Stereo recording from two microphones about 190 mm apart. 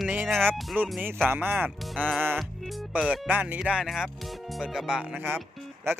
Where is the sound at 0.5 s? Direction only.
5° right (ahead or behind).